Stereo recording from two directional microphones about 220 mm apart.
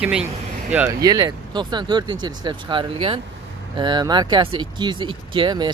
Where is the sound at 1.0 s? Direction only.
15° right (ahead or behind).